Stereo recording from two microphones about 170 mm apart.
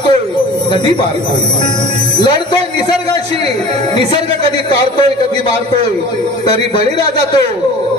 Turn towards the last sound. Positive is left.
turn(degrees=25)  # may be behind; listen again after turning